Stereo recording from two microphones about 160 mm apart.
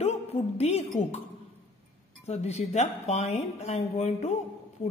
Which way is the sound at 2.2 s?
45° left (ahead or behind).